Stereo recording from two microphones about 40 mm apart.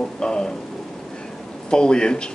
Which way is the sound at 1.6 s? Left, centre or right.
Left.